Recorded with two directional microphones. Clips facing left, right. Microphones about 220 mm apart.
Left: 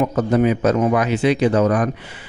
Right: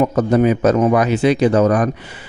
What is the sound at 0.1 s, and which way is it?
Speech, 45° right (ahead or behind).